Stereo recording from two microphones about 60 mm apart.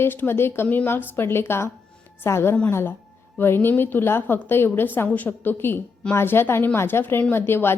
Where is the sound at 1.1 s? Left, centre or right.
Left.